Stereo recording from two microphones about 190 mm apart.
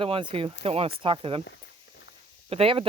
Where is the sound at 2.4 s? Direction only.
30° right (ahead or behind).